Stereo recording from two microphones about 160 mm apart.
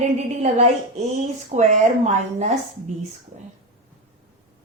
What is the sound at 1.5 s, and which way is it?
Speech, 50° right (ahead or behind).